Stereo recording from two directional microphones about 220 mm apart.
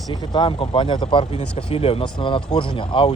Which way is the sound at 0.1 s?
20° left (ahead or behind).